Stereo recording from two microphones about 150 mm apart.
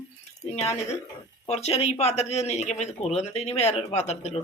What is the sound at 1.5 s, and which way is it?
Speech, 45° left (ahead or behind).